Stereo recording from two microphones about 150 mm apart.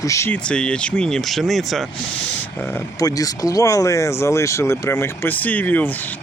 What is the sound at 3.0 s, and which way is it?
Speech, 25° left (ahead or behind).